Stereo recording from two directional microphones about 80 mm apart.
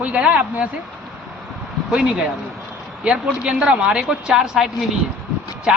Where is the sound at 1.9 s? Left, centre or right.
Centre.